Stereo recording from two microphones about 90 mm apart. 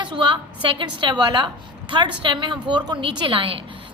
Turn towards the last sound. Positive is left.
turn(degrees=-70)  # may be behind; listen again after turning